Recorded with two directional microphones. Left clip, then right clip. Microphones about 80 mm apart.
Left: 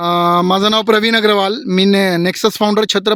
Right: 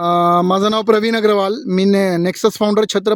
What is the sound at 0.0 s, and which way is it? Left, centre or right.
Speech, centre.